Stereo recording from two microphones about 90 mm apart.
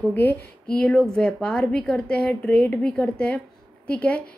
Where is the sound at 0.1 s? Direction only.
20° left (ahead or behind).